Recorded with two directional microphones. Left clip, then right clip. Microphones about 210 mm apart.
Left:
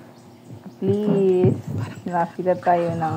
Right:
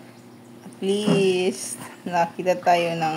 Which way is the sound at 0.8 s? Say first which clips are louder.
Left 1 dB; 5° right (ahead or behind).